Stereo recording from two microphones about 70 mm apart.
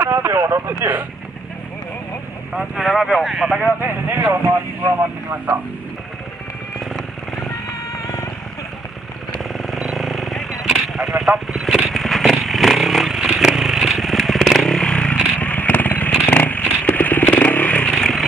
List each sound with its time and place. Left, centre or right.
0.0 s speech: right
2.5 s speech: centre
3.6 s speech: right
7.9 s vehicle: left
9.4 s vehicle: centre
11.3 s speech: centre
11.9 s vehicle: centre; by 17.9 s left
17.9 s a sound: centre